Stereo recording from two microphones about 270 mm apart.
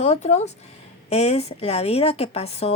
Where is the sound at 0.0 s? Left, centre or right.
Left.